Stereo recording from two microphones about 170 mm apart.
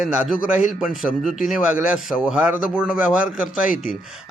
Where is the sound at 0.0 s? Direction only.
5° right (ahead or behind).